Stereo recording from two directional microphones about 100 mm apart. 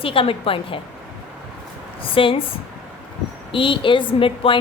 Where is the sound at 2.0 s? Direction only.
65° left (ahead or behind).